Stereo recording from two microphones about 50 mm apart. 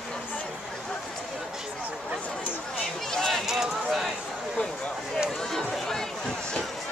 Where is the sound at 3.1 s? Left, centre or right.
Centre.